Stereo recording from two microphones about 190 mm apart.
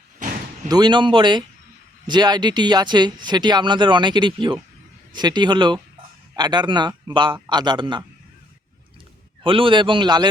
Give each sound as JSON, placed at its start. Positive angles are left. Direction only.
{"t": 0.7, "sound": "speech", "side_deg": -25}
{"t": 9.4, "sound": "speech", "side_deg": -25}